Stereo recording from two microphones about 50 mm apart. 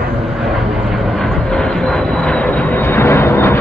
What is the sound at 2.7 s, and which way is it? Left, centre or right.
Vehicle, left.